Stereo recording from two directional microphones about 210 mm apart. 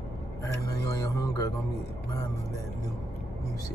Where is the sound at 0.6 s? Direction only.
15° left (ahead or behind).